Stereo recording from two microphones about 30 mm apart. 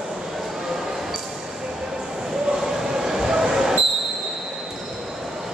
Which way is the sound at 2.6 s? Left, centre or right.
Centre.